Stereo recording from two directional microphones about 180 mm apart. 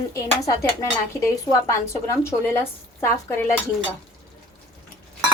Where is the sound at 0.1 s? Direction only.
15° left (ahead or behind).